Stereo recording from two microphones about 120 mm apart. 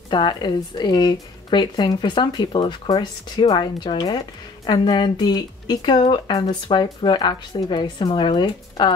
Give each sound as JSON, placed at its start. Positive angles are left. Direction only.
{"t": 0.1, "sound": "speech", "side_deg": 40}